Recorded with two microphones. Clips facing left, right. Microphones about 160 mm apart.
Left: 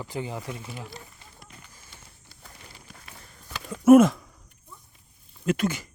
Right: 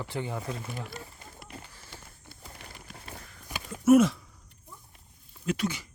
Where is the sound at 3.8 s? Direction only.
50° left (ahead or behind).